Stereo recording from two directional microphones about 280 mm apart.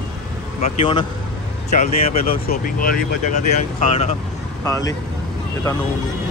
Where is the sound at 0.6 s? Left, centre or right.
Centre.